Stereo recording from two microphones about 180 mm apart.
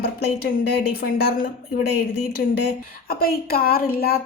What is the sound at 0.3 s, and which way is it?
A woman's voice, 60° left (ahead or behind).